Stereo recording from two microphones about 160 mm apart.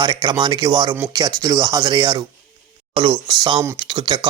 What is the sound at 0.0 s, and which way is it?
Speech, 25° right (ahead or behind).